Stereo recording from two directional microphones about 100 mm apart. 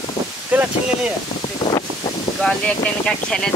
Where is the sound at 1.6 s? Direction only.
55° left (ahead or behind).